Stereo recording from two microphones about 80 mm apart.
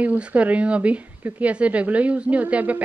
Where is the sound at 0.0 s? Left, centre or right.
Centre.